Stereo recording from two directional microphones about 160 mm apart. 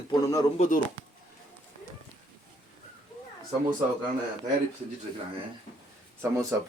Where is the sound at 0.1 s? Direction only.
20° left (ahead or behind).